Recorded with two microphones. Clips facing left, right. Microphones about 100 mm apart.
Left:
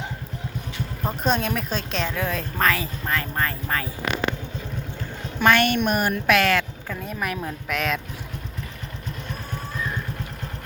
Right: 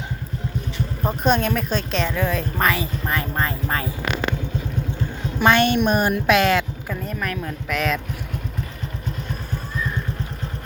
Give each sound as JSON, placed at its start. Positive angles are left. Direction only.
{"t": 1.0, "sound": "speech", "side_deg": 0}
{"t": 3.1, "sound": "speech", "side_deg": -20}
{"t": 5.4, "sound": "speech", "side_deg": -20}
{"t": 7.0, "sound": "speech", "side_deg": 5}